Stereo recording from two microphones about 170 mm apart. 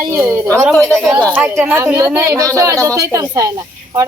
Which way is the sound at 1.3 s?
10° right (ahead or behind).